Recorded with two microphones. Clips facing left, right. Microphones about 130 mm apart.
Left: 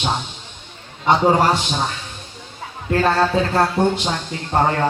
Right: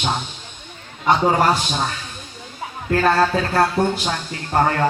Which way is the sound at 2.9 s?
25° left (ahead or behind).